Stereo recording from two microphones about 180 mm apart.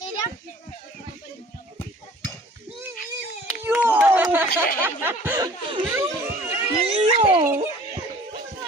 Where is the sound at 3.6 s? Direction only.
10° right (ahead or behind).